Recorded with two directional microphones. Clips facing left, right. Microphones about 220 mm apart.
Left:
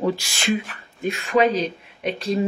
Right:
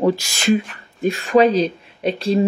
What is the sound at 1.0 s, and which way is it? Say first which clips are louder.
Speech: right 5 dB; 35° right (ahead or behind).